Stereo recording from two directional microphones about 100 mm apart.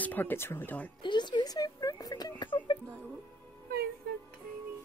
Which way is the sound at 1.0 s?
50° left (ahead or behind).